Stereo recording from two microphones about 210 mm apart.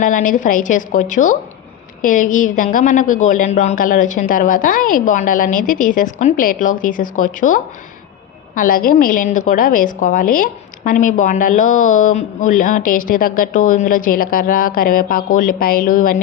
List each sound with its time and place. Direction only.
0.0 s a woman's voice: 40° left (ahead or behind)